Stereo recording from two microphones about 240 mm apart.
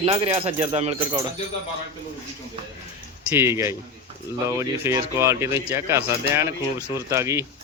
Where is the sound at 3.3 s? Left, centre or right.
Centre.